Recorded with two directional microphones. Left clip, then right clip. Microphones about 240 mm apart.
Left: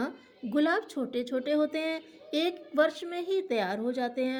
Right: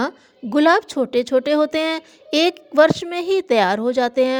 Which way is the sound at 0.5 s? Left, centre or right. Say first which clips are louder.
Right 13 dB; right.